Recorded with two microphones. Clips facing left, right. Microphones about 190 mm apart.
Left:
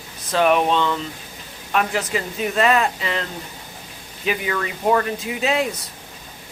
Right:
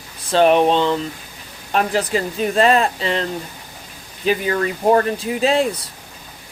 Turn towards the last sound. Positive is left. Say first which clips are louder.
# right 4 dB
turn(degrees=-30)  # may be behind; listen again after turning